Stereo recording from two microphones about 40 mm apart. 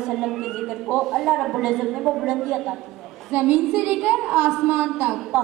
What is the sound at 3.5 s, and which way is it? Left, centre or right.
Speech, right.